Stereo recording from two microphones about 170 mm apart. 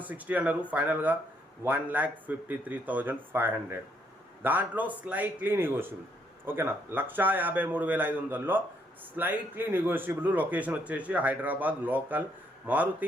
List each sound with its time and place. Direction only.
0.0 s a man's voice: 10° right (ahead or behind)